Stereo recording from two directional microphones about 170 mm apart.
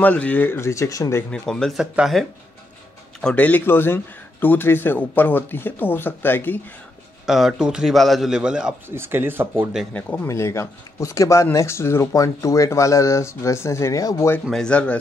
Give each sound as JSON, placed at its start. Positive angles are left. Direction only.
{"t": 0.0, "sound": "speech", "side_deg": 10}
{"t": 1.3, "sound": "a man's voice", "side_deg": 5}
{"t": 7.2, "sound": "a man's voice", "side_deg": 0}
{"t": 9.9, "sound": "speech", "side_deg": 10}
{"t": 14.4, "sound": "a man's voice", "side_deg": 5}